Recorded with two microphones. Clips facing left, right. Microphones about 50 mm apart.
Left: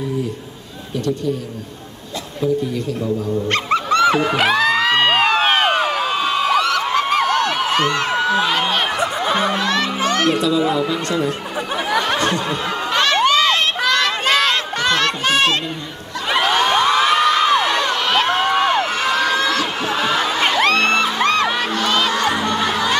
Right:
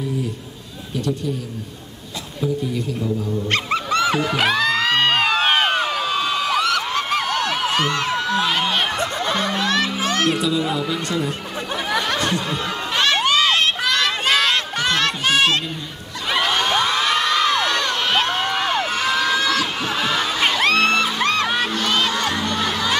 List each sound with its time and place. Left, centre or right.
3.4 s dog: centre
4.4 s music: centre
6.8 s a sound: centre
8.8 s music: centre
9.7 s music: centre
11.7 s a sound: centre
12.3 s snicker: centre
12.9 s crowd: centre
13.9 s a sound: centre
16.3 s children shouting: centre
17.0 s crowd: centre
21.8 s music: centre